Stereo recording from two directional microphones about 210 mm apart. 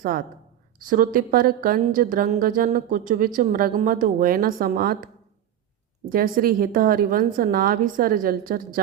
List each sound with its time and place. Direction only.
0.8 s a woman's voice: 40° right (ahead or behind)
6.1 s a woman's voice: 40° right (ahead or behind)